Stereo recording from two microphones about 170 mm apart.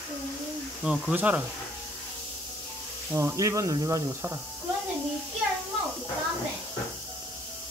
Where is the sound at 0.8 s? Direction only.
5° right (ahead or behind).